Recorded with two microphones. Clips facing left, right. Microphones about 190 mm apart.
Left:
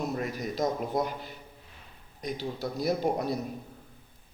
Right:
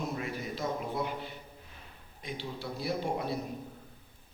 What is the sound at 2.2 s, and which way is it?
A man's voice, 40° left (ahead or behind).